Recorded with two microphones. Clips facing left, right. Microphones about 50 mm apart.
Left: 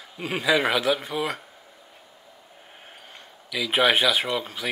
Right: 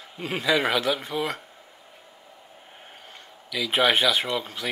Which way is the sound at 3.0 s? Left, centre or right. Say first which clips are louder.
Even; centre.